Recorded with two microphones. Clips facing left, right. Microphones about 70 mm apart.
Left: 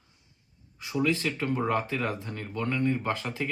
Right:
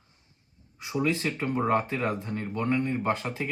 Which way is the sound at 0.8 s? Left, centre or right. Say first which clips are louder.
Even; centre.